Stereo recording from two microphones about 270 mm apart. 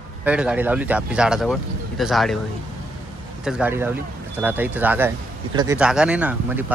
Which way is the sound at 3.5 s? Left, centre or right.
Centre.